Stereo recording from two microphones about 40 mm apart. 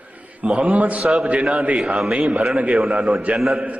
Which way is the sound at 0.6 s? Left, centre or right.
Right.